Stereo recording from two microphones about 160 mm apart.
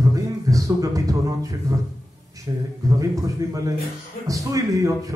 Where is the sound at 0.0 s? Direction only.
20° right (ahead or behind).